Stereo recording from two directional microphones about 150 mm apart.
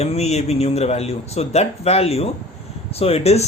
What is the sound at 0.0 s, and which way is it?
Speech, 45° left (ahead or behind).